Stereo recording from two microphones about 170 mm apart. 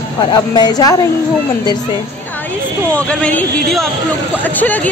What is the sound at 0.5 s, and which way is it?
Speech, 25° left (ahead or behind).